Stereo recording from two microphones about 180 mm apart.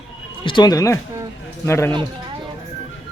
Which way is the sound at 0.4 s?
25° left (ahead or behind).